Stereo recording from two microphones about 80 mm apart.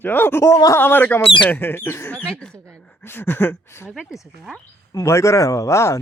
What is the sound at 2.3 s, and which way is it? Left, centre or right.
Speech, centre.